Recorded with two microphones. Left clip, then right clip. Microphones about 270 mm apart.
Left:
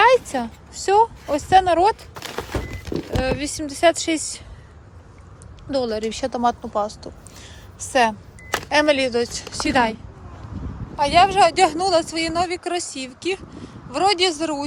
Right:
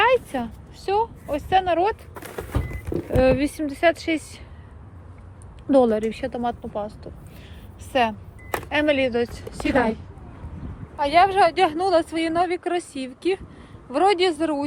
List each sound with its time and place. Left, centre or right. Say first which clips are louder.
0.0 s speech: left 4 dB; centre
2.2 s power windows: left 4 dB; left
3.2 s speech: right 6 dB; centre
5.7 s speech: right 5 dB; centre
6.0 s speech: left 4 dB; centre
10.9 s speech: left 2 dB; centre